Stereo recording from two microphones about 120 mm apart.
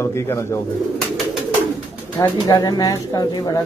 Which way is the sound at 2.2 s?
35° left (ahead or behind).